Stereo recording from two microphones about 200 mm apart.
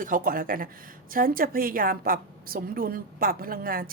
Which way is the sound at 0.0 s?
45° right (ahead or behind).